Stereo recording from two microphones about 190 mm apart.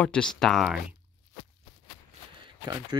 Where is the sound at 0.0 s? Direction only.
5° left (ahead or behind).